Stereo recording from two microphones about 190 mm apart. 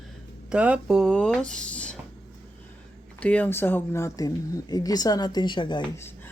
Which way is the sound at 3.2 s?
5° left (ahead or behind).